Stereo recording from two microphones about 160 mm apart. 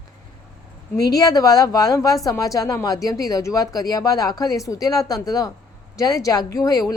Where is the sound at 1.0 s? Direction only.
25° left (ahead or behind).